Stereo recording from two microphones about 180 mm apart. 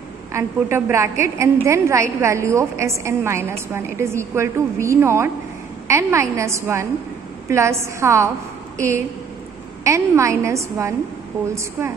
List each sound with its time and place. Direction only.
0.3 s a woman's voice: 15° right (ahead or behind)